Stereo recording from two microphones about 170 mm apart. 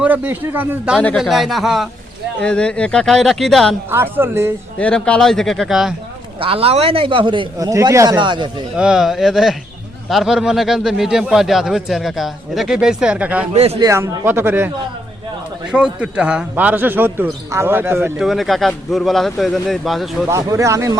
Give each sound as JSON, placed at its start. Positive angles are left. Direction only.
{"t": 0.0, "sound": "a man's voice", "side_deg": -10}
{"t": 3.8, "sound": "a man's voice", "side_deg": -15}
{"t": 4.8, "sound": "a man's voice", "side_deg": 5}
{"t": 6.4, "sound": "a man's voice", "side_deg": -35}
{"t": 8.7, "sound": "a man's voice", "side_deg": -5}
{"t": 13.5, "sound": "a man's voice", "side_deg": -35}
{"t": 13.8, "sound": "a man's voice", "side_deg": -20}
{"t": 15.7, "sound": "a man's voice", "side_deg": -5}
{"t": 18.2, "sound": "a man's voice", "side_deg": 0}
{"t": 20.2, "sound": "a man's voice", "side_deg": -15}